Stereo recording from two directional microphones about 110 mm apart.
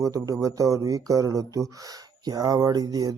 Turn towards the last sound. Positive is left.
turn(degrees=-35)  # may be behind; listen again after turning